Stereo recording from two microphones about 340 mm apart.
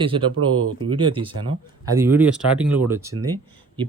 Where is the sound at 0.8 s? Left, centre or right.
Centre.